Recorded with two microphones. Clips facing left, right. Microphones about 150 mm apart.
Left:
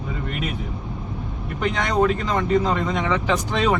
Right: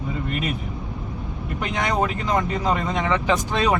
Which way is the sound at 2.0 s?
5° right (ahead or behind).